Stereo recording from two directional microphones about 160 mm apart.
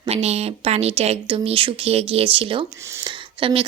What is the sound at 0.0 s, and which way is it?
Speech, 40° right (ahead or behind).